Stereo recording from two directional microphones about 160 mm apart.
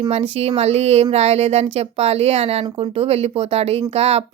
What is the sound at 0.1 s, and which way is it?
A woman's voice, 40° right (ahead or behind).